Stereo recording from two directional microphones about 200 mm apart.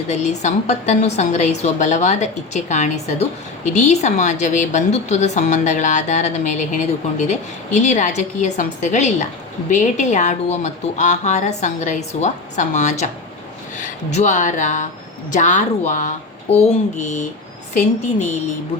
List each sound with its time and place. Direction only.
0.1 s a woman's voice: 35° left (ahead or behind)
14.1 s a woman's voice: 35° left (ahead or behind)